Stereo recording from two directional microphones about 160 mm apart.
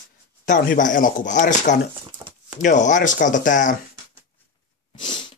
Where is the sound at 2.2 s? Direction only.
25° right (ahead or behind).